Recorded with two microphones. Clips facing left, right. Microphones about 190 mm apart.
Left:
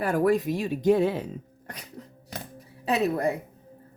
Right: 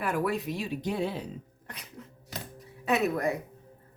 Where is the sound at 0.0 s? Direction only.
40° left (ahead or behind).